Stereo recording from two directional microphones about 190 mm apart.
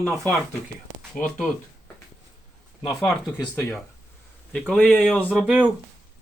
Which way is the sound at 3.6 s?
10° left (ahead or behind).